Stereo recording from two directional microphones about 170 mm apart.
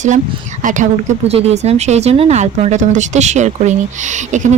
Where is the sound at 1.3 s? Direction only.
40° right (ahead or behind).